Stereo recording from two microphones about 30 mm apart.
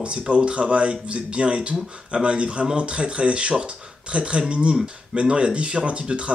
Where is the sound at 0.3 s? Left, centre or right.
Right.